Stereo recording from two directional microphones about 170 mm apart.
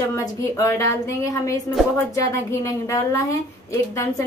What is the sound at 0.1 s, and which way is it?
Speech, 15° left (ahead or behind).